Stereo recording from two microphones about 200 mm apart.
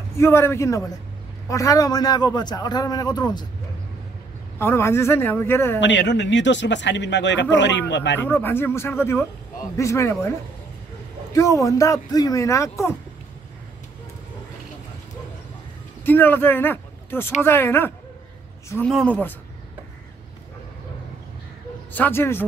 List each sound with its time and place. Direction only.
0.2 s a man's voice: 10° left (ahead or behind)
4.6 s speech: 10° left (ahead or behind)
5.8 s speech: 65° left (ahead or behind)
8.2 s speech: 10° left (ahead or behind)
11.3 s speech: 15° left (ahead or behind)
16.1 s speech: 10° left (ahead or behind)
21.9 s speech: 10° left (ahead or behind)